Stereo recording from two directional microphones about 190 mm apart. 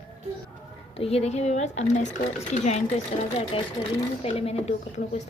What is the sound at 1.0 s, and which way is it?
A woman's voice, 30° left (ahead or behind).